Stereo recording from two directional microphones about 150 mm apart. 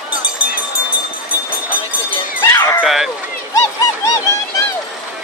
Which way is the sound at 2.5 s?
15° left (ahead or behind).